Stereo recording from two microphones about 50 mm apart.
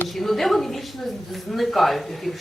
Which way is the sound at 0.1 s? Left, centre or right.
Centre.